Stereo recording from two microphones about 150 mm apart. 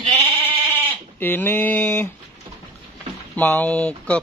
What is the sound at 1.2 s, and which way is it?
Speech, 15° left (ahead or behind).